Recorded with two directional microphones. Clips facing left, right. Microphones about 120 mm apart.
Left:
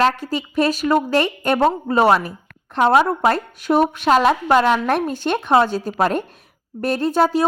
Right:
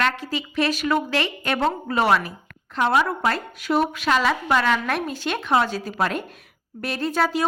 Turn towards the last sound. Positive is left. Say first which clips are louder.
# left 5 dB
turn(degrees=45)  # may be behind; listen again after turning